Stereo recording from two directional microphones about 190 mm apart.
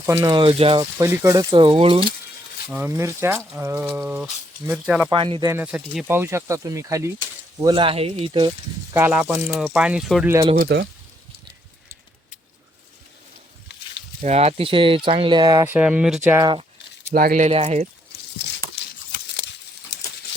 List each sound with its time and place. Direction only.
0.0 s speech: 15° right (ahead or behind)
0.9 s speech: 15° right (ahead or behind)
2.6 s speech: 10° right (ahead or behind)
5.1 s speech: 25° right (ahead or behind)
5.5 s speech: 10° right (ahead or behind); by 8.5 s 25° right (ahead or behind)
8.9 s speech: 10° right (ahead or behind)
10.4 s speech: 40° right (ahead or behind)
14.2 s speech: 35° right (ahead or behind); by 16.4 s 5° right (ahead or behind)
16.4 s speech: 25° right (ahead or behind)
17.1 s speech: 50° right (ahead or behind)
17.5 s speech: 35° right (ahead or behind)